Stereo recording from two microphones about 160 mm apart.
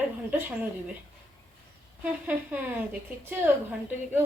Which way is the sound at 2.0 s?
10° right (ahead or behind).